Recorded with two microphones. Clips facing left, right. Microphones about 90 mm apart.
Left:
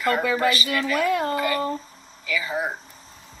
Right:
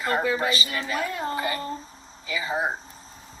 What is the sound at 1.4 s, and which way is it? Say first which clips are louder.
Speech: left 5 dB; 25° right (ahead or behind).